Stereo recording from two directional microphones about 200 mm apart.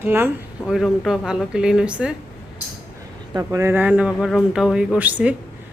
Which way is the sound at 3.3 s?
15° right (ahead or behind).